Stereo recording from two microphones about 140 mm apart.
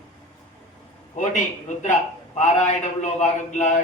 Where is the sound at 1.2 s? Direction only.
70° left (ahead or behind).